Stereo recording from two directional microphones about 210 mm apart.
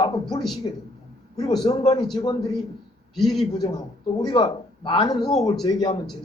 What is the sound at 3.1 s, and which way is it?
Speech, centre (ahead or behind).